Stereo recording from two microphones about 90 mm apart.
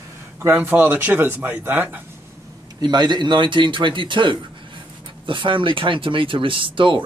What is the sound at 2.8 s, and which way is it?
Speech, 55° right (ahead or behind).